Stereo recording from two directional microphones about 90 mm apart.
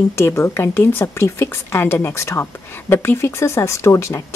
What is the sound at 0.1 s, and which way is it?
A woman's voice, 30° left (ahead or behind).